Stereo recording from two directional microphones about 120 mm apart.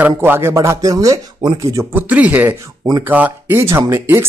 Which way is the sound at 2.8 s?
30° right (ahead or behind).